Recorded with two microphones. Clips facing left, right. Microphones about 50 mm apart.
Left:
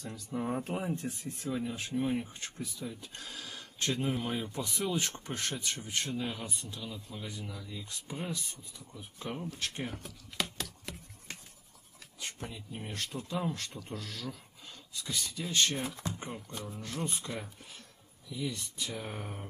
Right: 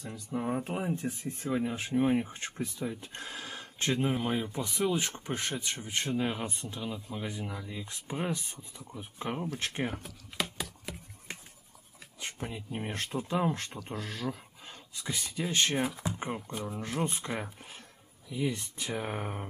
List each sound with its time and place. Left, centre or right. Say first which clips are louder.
0.0 s speech: right 2 dB; centre
1.2 s speech: right 6 dB; right
10.4 s a sound: right 2 dB; centre
12.2 s speech: right 3 dB; right